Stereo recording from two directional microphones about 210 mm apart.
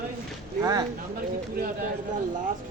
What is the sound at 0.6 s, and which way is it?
Speech, 15° right (ahead or behind).